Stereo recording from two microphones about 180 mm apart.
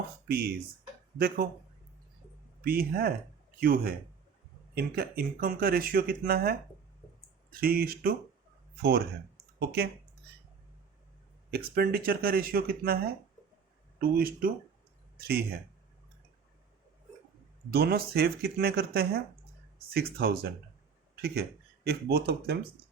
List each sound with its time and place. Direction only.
0.3 s speech: 60° right (ahead or behind)
2.6 s a man's voice: 55° right (ahead or behind)
11.5 s speech: 55° right (ahead or behind)
14.0 s speech: 55° right (ahead or behind)
17.7 s speech: 60° right (ahead or behind)